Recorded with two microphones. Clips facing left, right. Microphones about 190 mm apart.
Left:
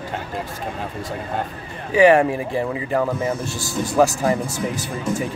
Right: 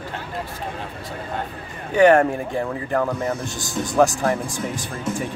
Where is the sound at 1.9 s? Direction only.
5° left (ahead or behind).